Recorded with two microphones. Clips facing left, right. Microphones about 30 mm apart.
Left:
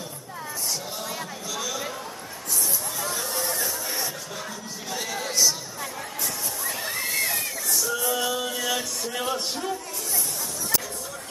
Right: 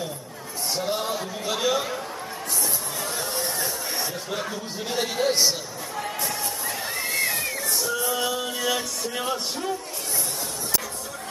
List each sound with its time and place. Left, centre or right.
0.7 s a sound: right
1.5 s chatter: right
3.1 s chatter: centre
4.3 s speech: right
6.8 s slosh: centre
7.6 s music: right
7.9 s music: centre